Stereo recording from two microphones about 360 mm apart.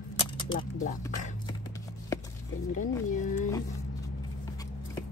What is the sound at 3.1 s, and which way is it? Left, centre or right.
Speech, left.